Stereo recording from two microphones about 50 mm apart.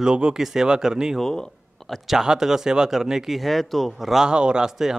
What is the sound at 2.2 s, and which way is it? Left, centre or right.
Speech, centre.